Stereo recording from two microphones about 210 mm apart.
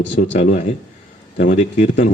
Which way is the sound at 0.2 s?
40° left (ahead or behind).